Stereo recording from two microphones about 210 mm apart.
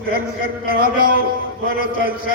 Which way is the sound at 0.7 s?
45° right (ahead or behind).